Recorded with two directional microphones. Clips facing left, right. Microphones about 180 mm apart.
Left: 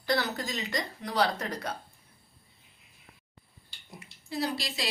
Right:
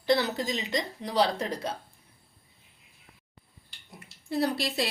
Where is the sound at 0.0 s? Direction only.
25° right (ahead or behind).